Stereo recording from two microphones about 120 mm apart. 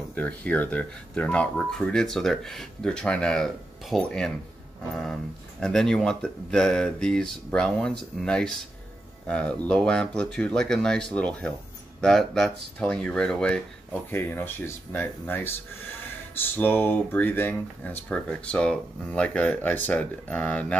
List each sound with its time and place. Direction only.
0.1 s speech: 10° left (ahead or behind)
5.6 s speech: 5° left (ahead or behind)